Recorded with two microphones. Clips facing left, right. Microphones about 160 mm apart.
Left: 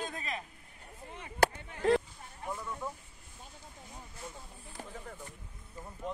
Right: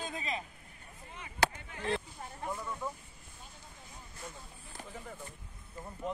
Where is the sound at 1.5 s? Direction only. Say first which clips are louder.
Left 8 dB; 40° left (ahead or behind).